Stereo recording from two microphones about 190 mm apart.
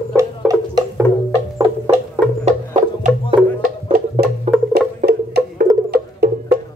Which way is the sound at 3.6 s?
50° right (ahead or behind).